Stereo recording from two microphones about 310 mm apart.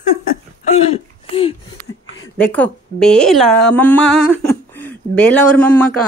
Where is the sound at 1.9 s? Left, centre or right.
Left.